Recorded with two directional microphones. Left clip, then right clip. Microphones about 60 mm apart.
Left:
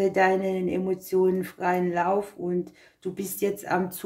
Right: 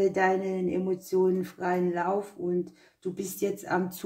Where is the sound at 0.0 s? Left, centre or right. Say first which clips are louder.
Left 3 dB; centre.